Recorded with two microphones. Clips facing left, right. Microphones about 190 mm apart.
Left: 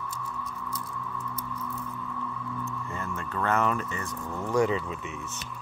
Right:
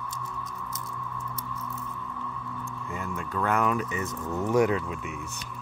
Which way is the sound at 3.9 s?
20° right (ahead or behind).